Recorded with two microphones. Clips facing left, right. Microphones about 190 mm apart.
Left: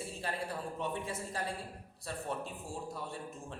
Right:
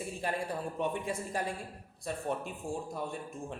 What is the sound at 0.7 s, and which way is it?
A man's voice, 15° right (ahead or behind).